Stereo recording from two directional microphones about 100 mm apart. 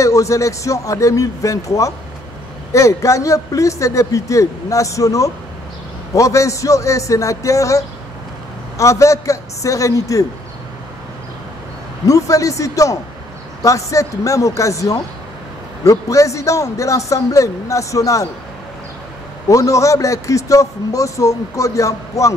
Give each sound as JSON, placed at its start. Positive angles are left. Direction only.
{"t": 0.0, "sound": "a man's voice", "side_deg": 30}
{"t": 12.1, "sound": "a man's voice", "side_deg": 30}
{"t": 19.5, "sound": "a man's voice", "side_deg": 30}